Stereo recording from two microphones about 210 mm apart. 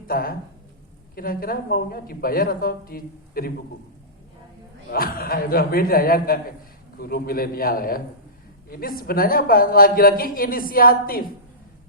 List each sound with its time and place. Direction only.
0.1 s a woman's voice: 45° left (ahead or behind)
4.9 s a woman's voice: 45° left (ahead or behind)